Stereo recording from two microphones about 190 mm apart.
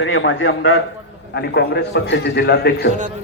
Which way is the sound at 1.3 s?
60° left (ahead or behind).